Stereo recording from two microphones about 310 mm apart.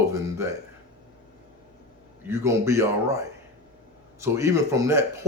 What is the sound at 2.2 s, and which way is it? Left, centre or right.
A man's voice, centre.